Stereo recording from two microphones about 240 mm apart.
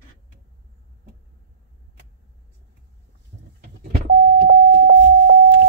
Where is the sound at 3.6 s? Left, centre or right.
Right.